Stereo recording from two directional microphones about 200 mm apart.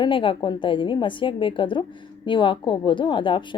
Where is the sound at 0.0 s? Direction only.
25° left (ahead or behind).